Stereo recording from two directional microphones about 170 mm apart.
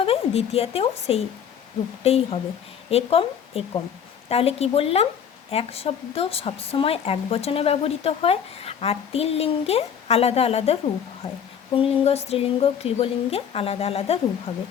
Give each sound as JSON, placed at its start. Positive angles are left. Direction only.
{"t": 0.0, "sound": "a woman's voice", "side_deg": 35}